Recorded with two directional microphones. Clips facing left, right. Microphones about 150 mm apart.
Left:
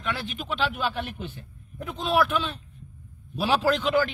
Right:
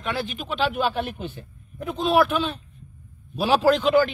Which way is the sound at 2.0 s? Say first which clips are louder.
Right 4 dB; 10° right (ahead or behind).